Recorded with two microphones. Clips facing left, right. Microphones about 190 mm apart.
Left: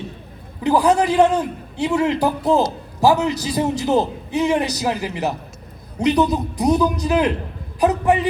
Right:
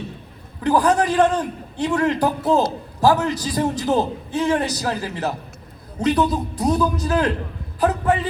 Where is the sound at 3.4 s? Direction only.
10° left (ahead or behind).